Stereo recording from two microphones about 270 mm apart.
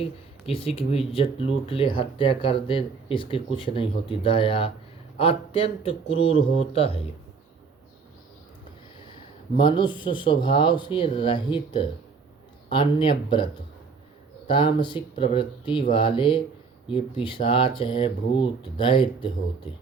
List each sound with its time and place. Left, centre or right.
0.4 s speech: left
9.6 s speech: centre